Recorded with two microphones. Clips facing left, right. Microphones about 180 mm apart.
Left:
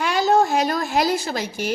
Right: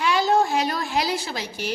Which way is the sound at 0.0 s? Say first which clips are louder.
Left 2 dB; 45° left (ahead or behind).